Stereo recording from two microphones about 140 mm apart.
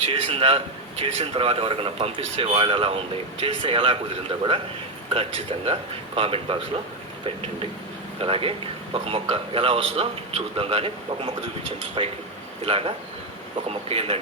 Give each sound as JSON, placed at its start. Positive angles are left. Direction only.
{"t": 0.1, "sound": "a man's voice", "side_deg": -45}
{"t": 8.2, "sound": "a man's voice", "side_deg": -40}